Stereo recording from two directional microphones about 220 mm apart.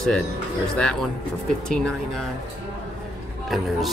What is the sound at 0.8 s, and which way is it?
Speech, 5° left (ahead or behind).